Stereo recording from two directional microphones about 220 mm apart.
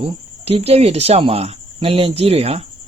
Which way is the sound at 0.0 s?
25° right (ahead or behind).